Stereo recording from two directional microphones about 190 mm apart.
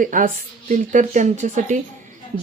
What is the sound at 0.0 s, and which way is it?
Speech, 45° right (ahead or behind).